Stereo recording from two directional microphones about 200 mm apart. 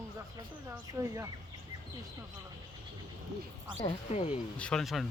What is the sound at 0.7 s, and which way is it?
Speech, 15° right (ahead or behind).